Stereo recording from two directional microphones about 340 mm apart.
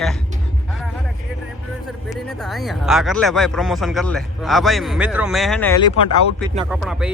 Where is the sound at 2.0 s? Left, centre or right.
Centre.